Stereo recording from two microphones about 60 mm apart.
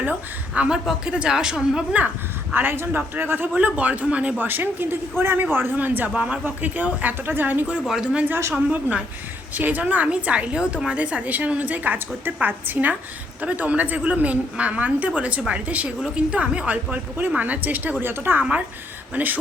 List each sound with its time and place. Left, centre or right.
0.0 s a woman's voice: right
0.7 s a woman's voice: centre
2.5 s speech: right
3.5 s a woman's voice: right
4.4 s a woman's voice: right
7.9 s a woman's voice: centre
9.6 s a woman's voice: right